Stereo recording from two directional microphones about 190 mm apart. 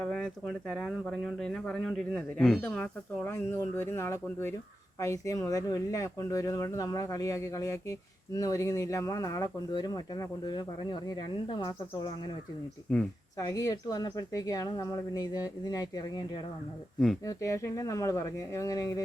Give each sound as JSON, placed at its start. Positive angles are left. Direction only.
{"t": 0.0, "sound": "speech", "side_deg": 5}
{"t": 12.9, "sound": "speech", "side_deg": 5}
{"t": 13.4, "sound": "speech", "side_deg": 15}